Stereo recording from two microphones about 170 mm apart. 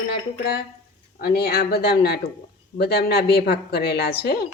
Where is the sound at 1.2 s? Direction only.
70° left (ahead or behind).